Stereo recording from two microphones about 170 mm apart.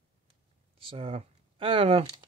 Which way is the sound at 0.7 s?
35° right (ahead or behind).